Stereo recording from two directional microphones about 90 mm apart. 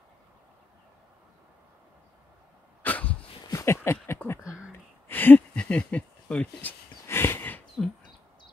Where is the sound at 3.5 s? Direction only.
25° left (ahead or behind).